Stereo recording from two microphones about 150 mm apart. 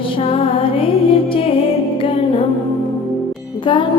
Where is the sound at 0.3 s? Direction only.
40° left (ahead or behind).